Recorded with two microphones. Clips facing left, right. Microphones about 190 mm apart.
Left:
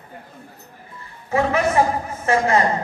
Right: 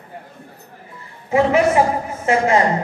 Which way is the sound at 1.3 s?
20° right (ahead or behind).